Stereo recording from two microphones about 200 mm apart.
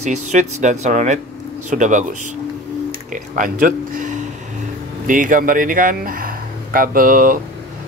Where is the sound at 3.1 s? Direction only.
40° right (ahead or behind).